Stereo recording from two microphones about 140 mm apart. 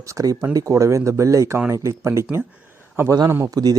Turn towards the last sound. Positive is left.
turn(degrees=-25)  # may be behind; listen again after turning